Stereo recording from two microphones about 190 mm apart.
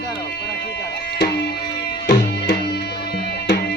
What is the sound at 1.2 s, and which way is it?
Tabla, 55° left (ahead or behind).